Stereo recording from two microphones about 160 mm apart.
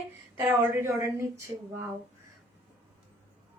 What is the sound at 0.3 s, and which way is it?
Speech, 15° right (ahead or behind).